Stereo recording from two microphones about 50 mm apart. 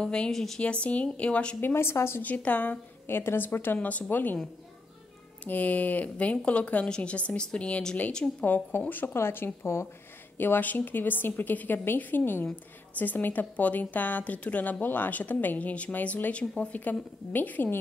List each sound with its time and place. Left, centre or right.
0.0 s speech: centre
0.3 s a woman's voice: centre
0.6 s speech: left
1.6 s speech: left
2.2 s a woman's voice: left
3.1 s a woman's voice: left
5.4 s a woman's voice: left; by 8.5 s centre
8.7 s a woman's voice: left
17.3 s a woman's voice: left